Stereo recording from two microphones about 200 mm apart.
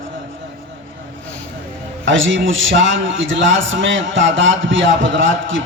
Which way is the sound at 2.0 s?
70° right (ahead or behind).